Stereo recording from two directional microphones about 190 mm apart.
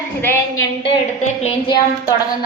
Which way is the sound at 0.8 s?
30° left (ahead or behind).